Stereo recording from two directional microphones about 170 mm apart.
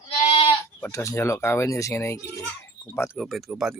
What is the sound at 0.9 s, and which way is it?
Speech, 20° left (ahead or behind).